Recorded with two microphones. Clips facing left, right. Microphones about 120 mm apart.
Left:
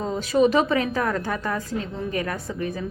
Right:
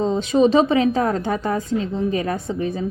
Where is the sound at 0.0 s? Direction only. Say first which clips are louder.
Right 3 dB; 25° right (ahead or behind).